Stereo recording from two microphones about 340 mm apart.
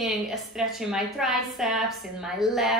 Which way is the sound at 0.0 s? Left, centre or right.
Centre.